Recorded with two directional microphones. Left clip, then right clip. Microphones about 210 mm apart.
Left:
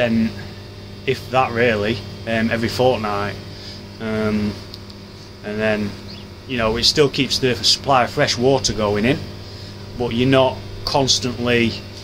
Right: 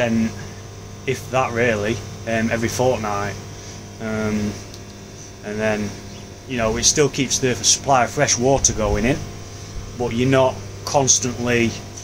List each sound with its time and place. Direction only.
1.0 s speech: 10° left (ahead or behind)
5.4 s speech: 10° left (ahead or behind)